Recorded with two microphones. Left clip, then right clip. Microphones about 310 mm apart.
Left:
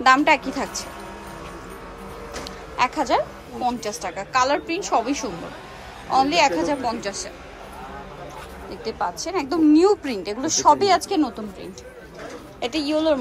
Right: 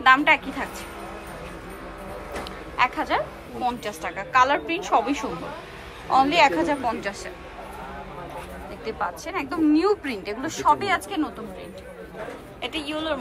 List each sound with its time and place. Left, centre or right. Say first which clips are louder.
0.0 s a woman's voice: left 1 dB; centre
2.8 s a woman's voice: left 2 dB; centre
8.8 s a woman's voice: left 3 dB; centre
12.5 s a woman's voice: left 7 dB; centre